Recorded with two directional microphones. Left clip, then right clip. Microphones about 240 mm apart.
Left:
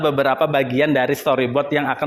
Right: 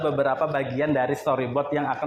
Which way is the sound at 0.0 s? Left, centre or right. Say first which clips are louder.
Left 6 dB; left.